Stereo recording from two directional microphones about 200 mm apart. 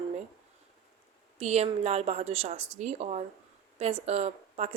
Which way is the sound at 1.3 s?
30° right (ahead or behind).